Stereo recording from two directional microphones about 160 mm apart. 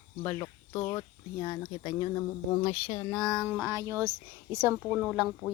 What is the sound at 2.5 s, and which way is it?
Speech, 35° left (ahead or behind).